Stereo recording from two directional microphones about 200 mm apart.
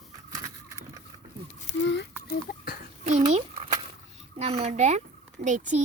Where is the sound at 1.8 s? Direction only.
60° left (ahead or behind).